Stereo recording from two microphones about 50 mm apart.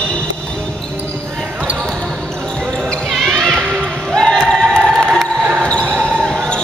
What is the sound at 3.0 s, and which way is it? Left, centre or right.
Basketball bounce, centre.